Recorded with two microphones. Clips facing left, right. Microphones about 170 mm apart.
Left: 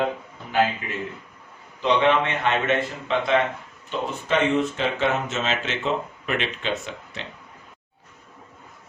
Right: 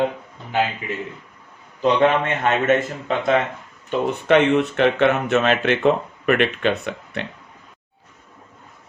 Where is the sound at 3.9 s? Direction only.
65° right (ahead or behind).